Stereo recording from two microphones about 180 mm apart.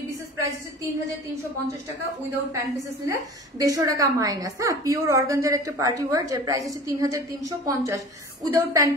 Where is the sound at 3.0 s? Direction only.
20° right (ahead or behind).